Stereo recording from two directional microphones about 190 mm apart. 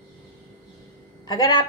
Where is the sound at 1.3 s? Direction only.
20° left (ahead or behind).